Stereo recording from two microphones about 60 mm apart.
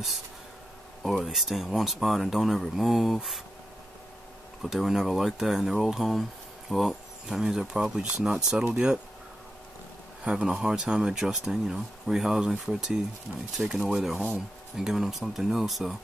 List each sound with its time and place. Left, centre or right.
1.0 s speech: centre
4.6 s speech: centre
10.2 s speech: centre